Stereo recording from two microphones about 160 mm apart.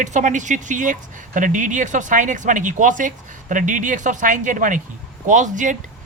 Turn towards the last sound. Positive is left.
turn(degrees=-50)  # may be behind; listen again after turning